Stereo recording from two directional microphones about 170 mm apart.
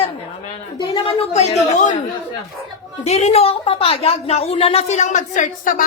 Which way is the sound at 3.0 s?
40° left (ahead or behind).